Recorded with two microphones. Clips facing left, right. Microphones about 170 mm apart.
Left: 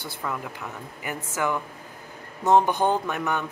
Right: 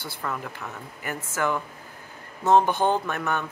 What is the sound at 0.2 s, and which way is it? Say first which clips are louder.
Speech: even; 15° left (ahead or behind).